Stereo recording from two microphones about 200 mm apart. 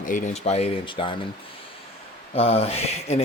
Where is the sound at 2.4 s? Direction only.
30° left (ahead or behind).